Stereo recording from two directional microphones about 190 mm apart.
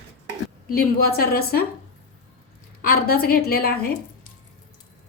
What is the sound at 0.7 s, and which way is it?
Speech, 55° left (ahead or behind).